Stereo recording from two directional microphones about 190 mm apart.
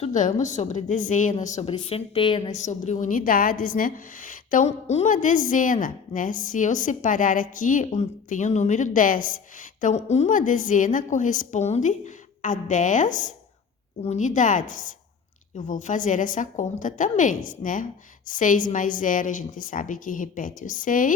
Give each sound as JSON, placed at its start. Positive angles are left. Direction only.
{"t": 0.0, "sound": "a woman's voice", "side_deg": 40}
{"t": 1.7, "sound": "a woman's voice", "side_deg": 30}
{"t": 2.5, "sound": "a woman's voice", "side_deg": 40}